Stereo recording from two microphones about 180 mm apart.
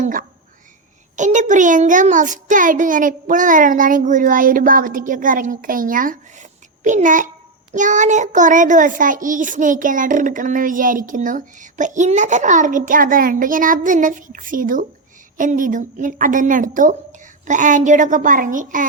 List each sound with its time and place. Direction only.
0.0 s whispering: 50° right (ahead or behind)
1.1 s a child's voice: 45° right (ahead or behind)